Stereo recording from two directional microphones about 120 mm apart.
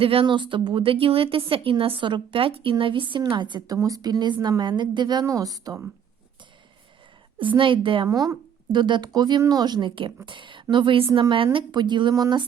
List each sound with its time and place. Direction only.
0.0 s a woman's voice: 50° right (ahead or behind)
3.8 s speech: 30° right (ahead or behind)
7.3 s a woman's voice: 45° right (ahead or behind)
8.0 s a woman's voice: 25° right (ahead or behind)
12.1 s a sound: 30° right (ahead or behind)